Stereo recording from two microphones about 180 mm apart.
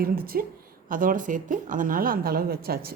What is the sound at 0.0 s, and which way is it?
A woman's voice, 55° right (ahead or behind).